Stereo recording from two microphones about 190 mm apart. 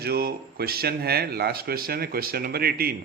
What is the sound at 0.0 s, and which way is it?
Speech, 55° right (ahead or behind).